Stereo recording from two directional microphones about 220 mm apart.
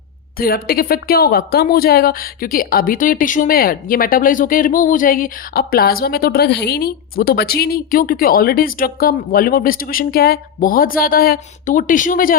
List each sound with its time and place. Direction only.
0.3 s a woman's voice: 45° left (ahead or behind)